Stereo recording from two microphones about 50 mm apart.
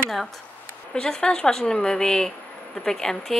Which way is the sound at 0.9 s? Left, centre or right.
Centre.